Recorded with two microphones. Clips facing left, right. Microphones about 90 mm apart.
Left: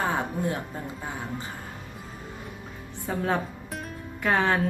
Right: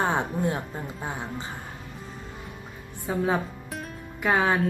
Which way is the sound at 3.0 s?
10° right (ahead or behind).